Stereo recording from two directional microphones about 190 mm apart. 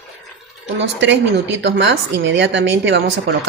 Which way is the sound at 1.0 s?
70° right (ahead or behind).